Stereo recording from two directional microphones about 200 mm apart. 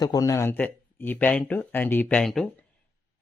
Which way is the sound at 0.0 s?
15° left (ahead or behind).